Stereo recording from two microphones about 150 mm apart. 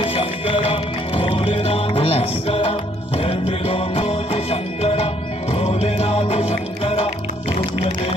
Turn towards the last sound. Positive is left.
turn(degrees=40)  # may be behind; listen again after turning